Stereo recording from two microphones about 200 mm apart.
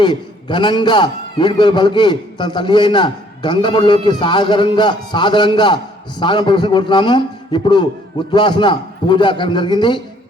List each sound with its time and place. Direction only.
0.0 s a man's voice: 25° left (ahead or behind)